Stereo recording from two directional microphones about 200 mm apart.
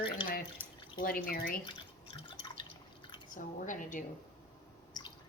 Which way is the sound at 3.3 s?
40° left (ahead or behind).